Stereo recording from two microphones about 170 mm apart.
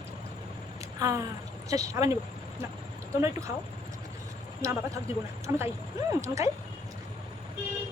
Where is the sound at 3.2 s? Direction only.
15° right (ahead or behind).